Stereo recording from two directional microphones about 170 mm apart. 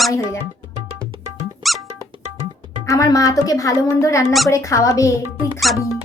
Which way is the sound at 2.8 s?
20° left (ahead or behind).